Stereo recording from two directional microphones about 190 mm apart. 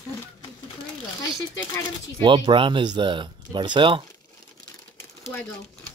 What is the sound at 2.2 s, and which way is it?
Speech, 25° right (ahead or behind).